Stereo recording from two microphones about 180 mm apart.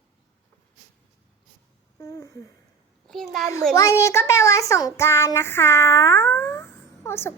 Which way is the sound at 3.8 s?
15° left (ahead or behind).